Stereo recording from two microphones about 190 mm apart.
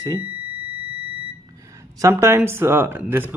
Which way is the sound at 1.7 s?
15° right (ahead or behind).